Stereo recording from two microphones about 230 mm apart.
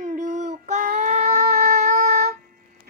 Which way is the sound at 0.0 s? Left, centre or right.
Right.